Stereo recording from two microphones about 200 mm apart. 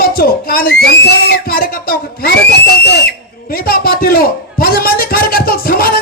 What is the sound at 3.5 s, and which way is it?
A man's voice, 45° left (ahead or behind).